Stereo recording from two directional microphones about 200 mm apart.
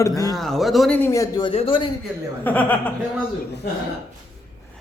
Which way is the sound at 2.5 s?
10° left (ahead or behind).